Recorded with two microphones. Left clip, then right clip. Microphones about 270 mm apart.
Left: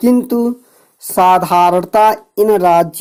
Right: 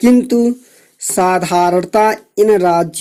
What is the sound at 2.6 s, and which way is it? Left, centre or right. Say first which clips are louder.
Speech: left 3 dB; centre.